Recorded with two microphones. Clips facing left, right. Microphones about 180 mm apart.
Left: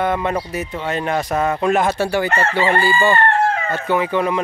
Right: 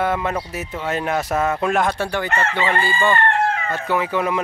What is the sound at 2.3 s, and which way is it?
Chicken, 35° left (ahead or behind).